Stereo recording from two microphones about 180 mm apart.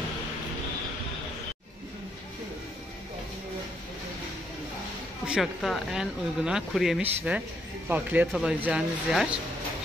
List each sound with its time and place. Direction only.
5.2 s speech: centre (ahead or behind)